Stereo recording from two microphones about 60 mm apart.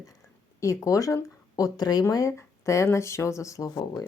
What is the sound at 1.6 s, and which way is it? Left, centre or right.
Speech, left.